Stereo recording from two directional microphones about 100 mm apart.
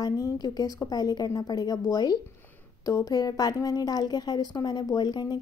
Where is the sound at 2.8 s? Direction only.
30° left (ahead or behind).